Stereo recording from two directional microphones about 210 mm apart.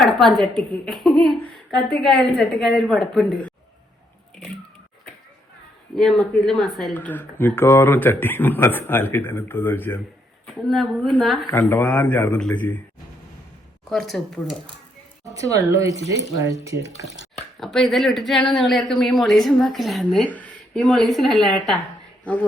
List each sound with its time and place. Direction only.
0.0 s a woman's voice: centre (ahead or behind)
6.0 s a woman's voice: centre (ahead or behind)
13.9 s a woman's voice: centre (ahead or behind)
15.2 s speech: 15° right (ahead or behind)
17.6 s a woman's voice: centre (ahead or behind)